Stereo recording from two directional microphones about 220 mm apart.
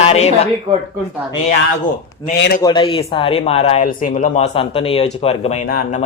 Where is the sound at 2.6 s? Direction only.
20° left (ahead or behind).